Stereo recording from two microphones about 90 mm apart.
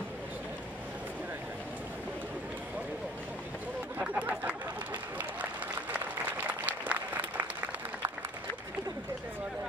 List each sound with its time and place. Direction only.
4.0 s chatter: 15° right (ahead or behind)
5.4 s applause: 20° right (ahead or behind)